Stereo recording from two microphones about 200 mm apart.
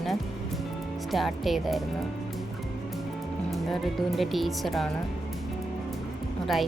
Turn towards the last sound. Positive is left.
turn(degrees=0)  # may be behind; listen again after turning